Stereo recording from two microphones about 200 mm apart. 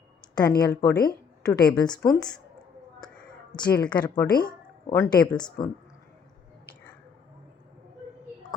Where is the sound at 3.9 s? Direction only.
20° left (ahead or behind).